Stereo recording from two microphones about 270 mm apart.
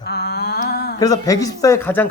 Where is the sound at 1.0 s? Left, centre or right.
Centre.